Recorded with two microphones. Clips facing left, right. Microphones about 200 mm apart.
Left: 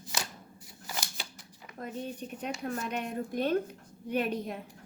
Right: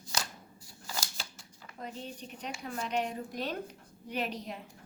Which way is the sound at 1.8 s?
50° left (ahead or behind).